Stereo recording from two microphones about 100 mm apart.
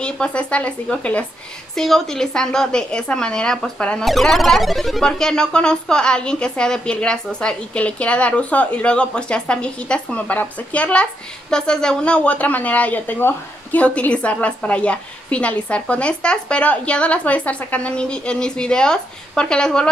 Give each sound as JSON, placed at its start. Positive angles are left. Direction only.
{"t": 0.0, "sound": "a woman's voice", "side_deg": 10}